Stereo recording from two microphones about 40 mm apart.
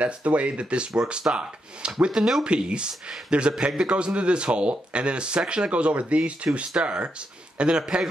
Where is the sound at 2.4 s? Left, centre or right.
Right.